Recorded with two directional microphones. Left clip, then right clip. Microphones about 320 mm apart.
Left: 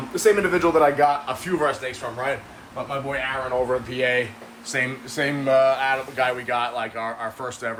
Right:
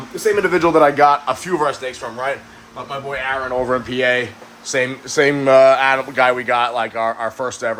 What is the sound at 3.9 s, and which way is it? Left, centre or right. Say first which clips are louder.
Speech: right 5 dB; centre.